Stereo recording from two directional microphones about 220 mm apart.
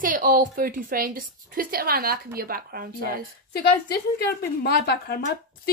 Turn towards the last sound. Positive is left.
turn(degrees=45)  # may be behind; listen again after turning